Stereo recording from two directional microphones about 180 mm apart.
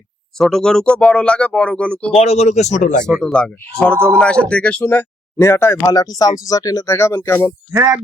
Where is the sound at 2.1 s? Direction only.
35° left (ahead or behind).